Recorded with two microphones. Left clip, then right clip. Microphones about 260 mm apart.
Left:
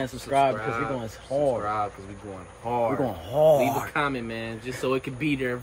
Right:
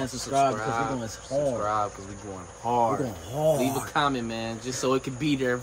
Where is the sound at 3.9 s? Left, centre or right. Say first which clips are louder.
Right 1 dB; right.